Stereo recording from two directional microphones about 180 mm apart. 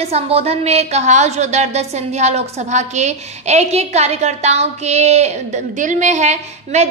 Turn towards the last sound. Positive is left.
turn(degrees=-40)  # may be behind; listen again after turning